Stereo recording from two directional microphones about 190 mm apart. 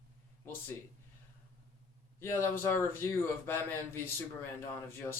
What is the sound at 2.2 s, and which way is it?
Speech, 10° left (ahead or behind).